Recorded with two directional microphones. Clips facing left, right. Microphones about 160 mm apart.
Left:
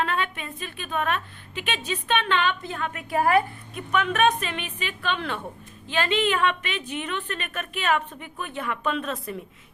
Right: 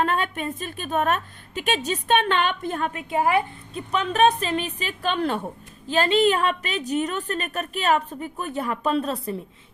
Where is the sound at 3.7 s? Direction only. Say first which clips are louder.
Right 1 dB; 30° right (ahead or behind).